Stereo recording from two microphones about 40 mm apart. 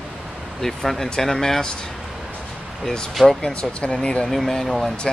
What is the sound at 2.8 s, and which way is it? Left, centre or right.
Speech, centre.